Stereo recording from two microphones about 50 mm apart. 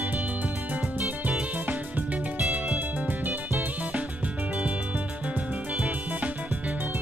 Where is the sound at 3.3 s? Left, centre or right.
Right.